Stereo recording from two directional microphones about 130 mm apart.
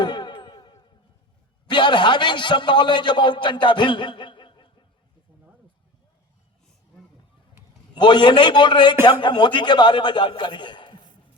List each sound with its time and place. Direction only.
0.0 s a sound: 35° left (ahead or behind)
1.6 s a man's voice: 35° left (ahead or behind)
7.9 s a man's voice: 35° left (ahead or behind)